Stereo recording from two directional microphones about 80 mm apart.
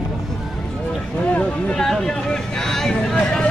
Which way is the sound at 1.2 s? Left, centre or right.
Centre.